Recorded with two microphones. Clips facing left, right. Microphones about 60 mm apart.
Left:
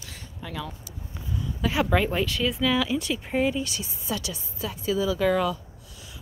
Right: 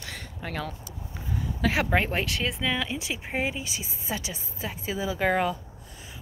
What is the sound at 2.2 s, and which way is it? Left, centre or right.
Speech, right.